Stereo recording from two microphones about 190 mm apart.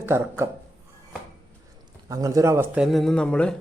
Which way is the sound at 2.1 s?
15° right (ahead or behind).